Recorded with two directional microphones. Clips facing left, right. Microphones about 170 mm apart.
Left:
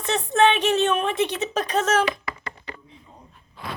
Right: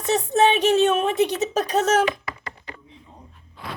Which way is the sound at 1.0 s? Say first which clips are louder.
Right 3 dB; 40° right (ahead or behind).